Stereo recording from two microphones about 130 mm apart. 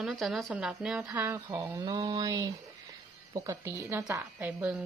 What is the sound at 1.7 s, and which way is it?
A woman's voice, 30° right (ahead or behind).